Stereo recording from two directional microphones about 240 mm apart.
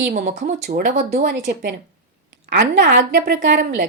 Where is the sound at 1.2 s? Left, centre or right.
Right.